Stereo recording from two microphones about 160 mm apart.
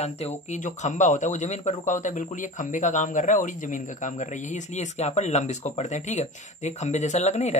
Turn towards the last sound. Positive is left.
turn(degrees=45)  # may be behind; listen again after turning